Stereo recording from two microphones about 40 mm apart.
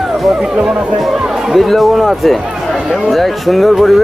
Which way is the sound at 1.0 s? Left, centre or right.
Centre.